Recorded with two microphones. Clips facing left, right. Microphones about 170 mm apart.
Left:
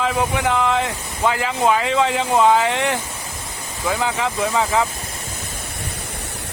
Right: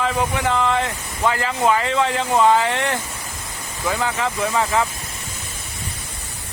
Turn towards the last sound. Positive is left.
turn(degrees=15)  # may be behind; listen again after turning